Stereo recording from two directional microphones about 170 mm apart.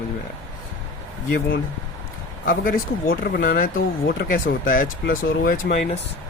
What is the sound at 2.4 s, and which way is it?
Speech, 55° left (ahead or behind).